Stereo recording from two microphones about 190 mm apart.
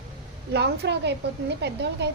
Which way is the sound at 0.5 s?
60° right (ahead or behind).